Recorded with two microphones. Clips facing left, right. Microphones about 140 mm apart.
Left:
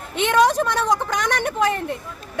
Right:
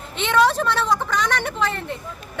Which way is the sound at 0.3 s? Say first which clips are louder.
Even; 15° left (ahead or behind).